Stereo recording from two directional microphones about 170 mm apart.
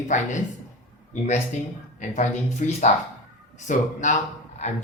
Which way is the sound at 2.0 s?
45° left (ahead or behind).